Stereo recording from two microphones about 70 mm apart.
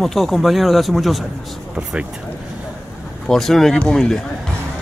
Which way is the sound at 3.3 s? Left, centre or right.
Centre.